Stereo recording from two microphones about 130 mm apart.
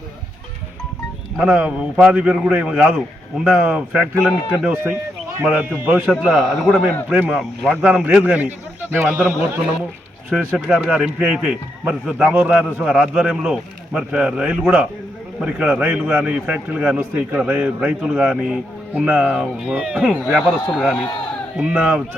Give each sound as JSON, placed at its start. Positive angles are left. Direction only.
{"t": 1.4, "sound": "a man's voice", "side_deg": -15}
{"t": 21.6, "sound": "a man's voice", "side_deg": -10}